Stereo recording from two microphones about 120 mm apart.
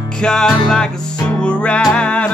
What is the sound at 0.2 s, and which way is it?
Music, 5° left (ahead or behind).